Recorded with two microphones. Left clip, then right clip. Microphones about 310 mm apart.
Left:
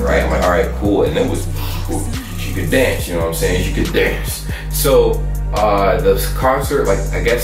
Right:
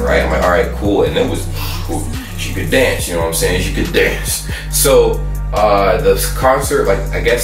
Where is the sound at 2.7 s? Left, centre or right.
Centre.